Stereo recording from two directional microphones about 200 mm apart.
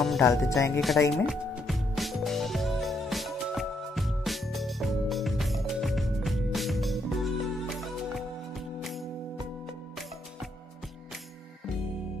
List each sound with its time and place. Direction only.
0.0 s music: centre (ahead or behind)
0.3 s speech: 15° left (ahead or behind)
0.7 s speech: centre (ahead or behind)
1.1 s music: centre (ahead or behind)